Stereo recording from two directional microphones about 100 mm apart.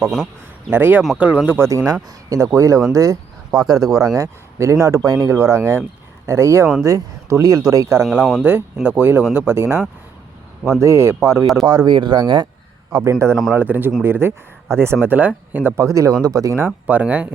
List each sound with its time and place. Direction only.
0.7 s speech: 20° right (ahead or behind); by 5.3 s 40° right (ahead or behind)
5.3 s speech: 30° right (ahead or behind)
8.2 s speech: 5° left (ahead or behind)
8.4 s speech: 20° right (ahead or behind)
11.6 s speech: 40° right (ahead or behind)
12.9 s speech: 30° right (ahead or behind)
16.6 s speech: 15° right (ahead or behind)